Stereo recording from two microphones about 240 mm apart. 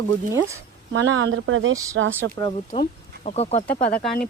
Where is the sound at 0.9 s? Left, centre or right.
Right.